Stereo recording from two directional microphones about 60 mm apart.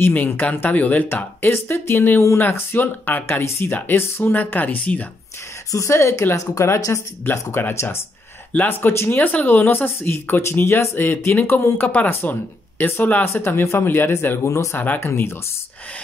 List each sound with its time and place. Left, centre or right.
0.0 s speech: left
2.4 s speech: left
5.7 s speech: left
6.3 s speech: left
7.2 s speech: left
14.4 s speech: left
15.0 s speech: left